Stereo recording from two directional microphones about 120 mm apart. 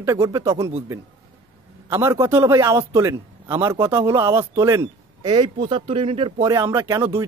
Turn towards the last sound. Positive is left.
turn(degrees=-25)  # may be behind; listen again after turning